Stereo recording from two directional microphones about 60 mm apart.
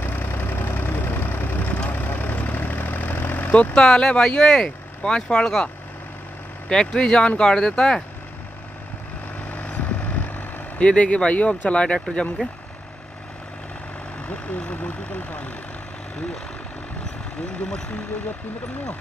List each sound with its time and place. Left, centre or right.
0.0 s vehicle: left
3.7 s speech: centre
6.7 s speech: centre
9.4 s vehicle: left
14.2 s speech: centre